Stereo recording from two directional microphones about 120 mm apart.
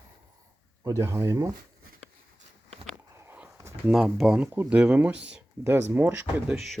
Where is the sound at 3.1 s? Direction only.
20° right (ahead or behind).